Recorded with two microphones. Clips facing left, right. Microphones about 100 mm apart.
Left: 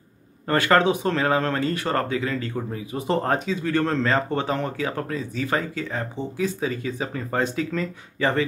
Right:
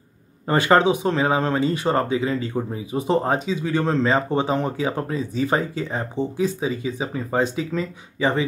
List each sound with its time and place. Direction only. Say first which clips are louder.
0.5 s speech: right 2 dB; 20° right (ahead or behind)